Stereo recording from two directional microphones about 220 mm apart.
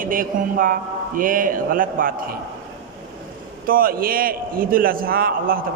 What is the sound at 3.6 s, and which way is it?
A man's voice, 40° right (ahead or behind).